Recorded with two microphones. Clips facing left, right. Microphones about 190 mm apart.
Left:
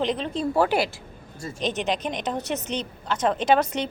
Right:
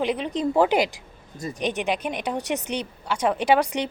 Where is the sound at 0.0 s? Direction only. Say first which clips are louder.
Right 1 dB; 10° right (ahead or behind).